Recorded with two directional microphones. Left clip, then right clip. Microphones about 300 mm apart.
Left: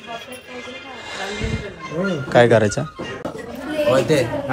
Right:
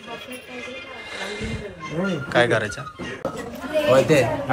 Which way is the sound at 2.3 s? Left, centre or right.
Centre.